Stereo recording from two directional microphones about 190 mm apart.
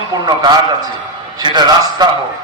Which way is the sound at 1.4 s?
25° right (ahead or behind).